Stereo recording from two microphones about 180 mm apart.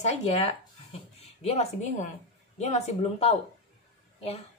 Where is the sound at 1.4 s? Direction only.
35° left (ahead or behind).